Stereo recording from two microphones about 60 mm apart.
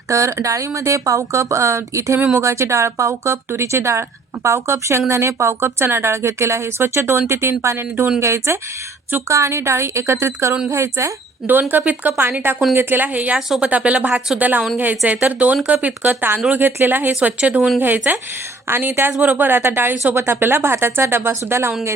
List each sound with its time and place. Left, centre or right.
0.1 s speech: right
11.8 s speech: right
17.2 s speech: right
19.2 s speech: right